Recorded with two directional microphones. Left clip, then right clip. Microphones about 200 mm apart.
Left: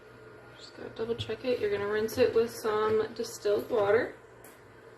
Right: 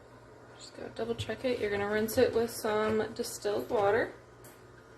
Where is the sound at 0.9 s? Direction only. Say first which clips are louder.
Left 2 dB; 35° right (ahead or behind).